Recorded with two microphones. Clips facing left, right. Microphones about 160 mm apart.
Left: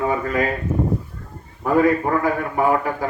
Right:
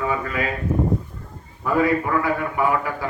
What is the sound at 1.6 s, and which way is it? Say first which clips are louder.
A man's voice: left 3 dB; 40° left (ahead or behind).